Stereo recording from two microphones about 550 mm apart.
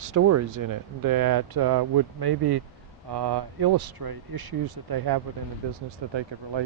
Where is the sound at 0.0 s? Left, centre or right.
Right.